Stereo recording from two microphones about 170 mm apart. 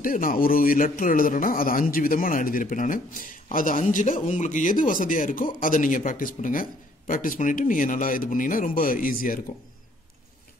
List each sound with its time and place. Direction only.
0.0 s a man's voice: 55° left (ahead or behind)